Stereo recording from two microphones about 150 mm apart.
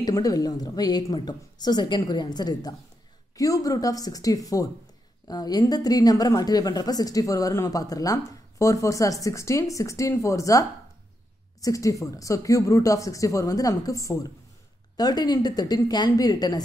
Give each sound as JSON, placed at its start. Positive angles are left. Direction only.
{"t": 0.0, "sound": "a woman's voice", "side_deg": 25}